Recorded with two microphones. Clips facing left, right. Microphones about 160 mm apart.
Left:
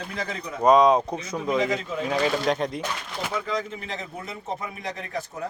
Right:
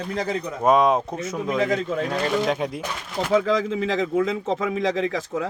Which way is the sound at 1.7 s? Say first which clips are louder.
Right 4 dB; 50° right (ahead or behind).